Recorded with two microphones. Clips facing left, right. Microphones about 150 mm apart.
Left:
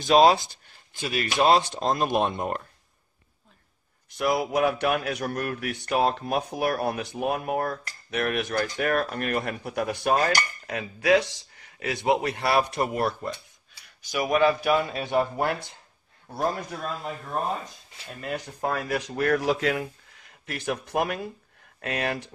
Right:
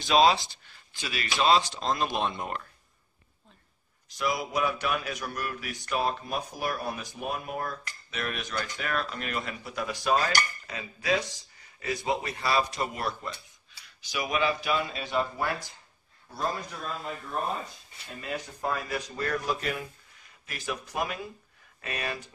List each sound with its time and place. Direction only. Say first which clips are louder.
0.0 s speech: left 4 dB; 45° left (ahead or behind)
4.1 s speech: left 5 dB; 60° left (ahead or behind)
11.3 s a man's voice: left 6 dB; 85° left; by 15.0 s 50° left (ahead or behind)
18.2 s a man's voice: left 3 dB; 55° left (ahead or behind)